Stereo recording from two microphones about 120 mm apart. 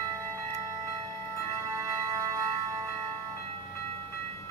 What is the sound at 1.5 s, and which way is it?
Music, 25° right (ahead or behind).